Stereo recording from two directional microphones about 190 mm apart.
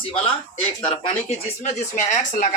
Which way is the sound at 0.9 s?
40° left (ahead or behind).